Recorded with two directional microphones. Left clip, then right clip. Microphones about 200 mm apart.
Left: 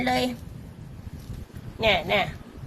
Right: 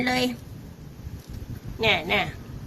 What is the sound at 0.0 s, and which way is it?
Speech, 10° left (ahead or behind).